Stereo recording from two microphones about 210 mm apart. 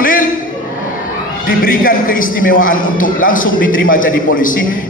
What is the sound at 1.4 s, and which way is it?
A man's voice, 40° left (ahead or behind).